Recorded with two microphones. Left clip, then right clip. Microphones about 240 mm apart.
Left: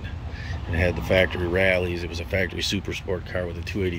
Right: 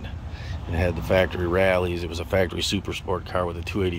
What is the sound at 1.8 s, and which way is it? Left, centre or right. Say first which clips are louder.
Speech: right 1 dB; centre.